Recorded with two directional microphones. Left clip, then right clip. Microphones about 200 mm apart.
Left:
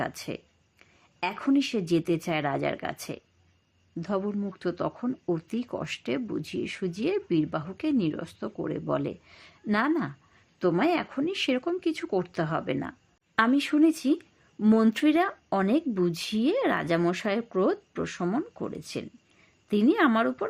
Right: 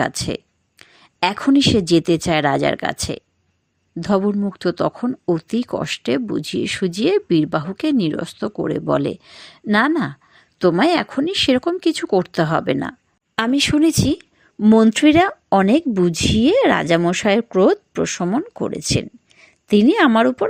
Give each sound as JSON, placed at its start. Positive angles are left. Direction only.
{"t": 0.0, "sound": "speech", "side_deg": -35}